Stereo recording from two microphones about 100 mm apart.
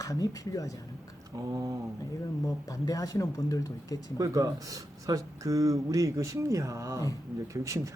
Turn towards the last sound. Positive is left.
turn(degrees=-30)  # may be behind; listen again after turning